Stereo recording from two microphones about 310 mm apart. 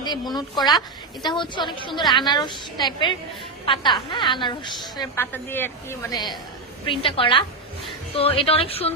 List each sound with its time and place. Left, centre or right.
0.0 s a woman's voice: centre